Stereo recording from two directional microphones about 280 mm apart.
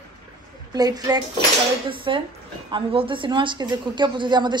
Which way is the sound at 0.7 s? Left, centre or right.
Centre.